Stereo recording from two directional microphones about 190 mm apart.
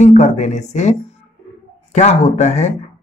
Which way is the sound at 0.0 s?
35° left (ahead or behind).